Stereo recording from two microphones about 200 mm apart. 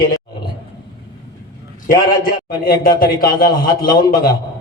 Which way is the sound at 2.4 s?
50° left (ahead or behind).